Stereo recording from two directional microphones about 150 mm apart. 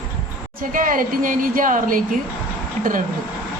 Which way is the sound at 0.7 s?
65° right (ahead or behind).